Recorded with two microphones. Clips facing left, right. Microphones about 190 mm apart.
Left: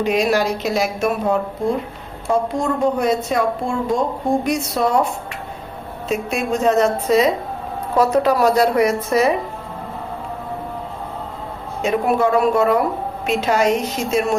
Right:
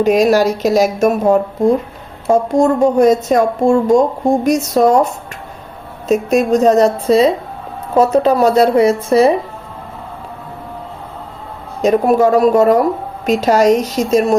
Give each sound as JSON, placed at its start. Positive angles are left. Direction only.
{"t": 0.0, "sound": "a woman's voice", "side_deg": -45}
{"t": 6.1, "sound": "a woman's voice", "side_deg": -40}
{"t": 11.8, "sound": "a woman's voice", "side_deg": -40}